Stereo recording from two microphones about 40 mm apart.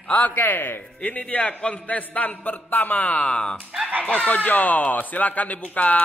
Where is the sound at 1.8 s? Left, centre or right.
Left.